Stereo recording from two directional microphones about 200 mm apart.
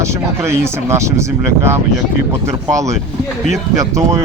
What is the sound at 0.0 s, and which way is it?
Speech, 15° right (ahead or behind).